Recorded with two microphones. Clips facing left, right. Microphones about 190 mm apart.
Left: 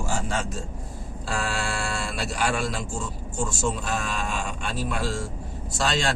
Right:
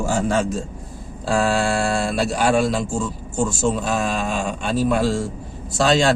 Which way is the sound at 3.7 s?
40° right (ahead or behind).